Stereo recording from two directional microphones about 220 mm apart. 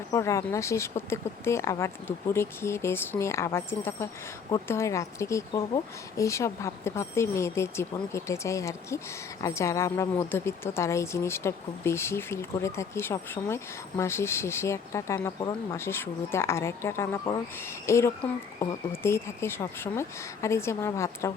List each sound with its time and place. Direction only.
0.1 s a woman's voice: 15° left (ahead or behind)